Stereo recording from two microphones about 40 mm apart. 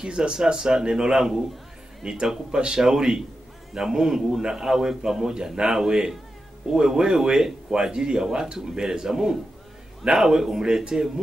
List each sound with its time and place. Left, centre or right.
0.0 s a man's voice: right